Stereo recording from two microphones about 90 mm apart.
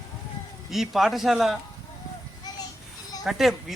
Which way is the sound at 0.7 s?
Centre (ahead or behind).